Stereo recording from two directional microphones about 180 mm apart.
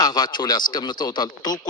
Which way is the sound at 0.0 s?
25° left (ahead or behind).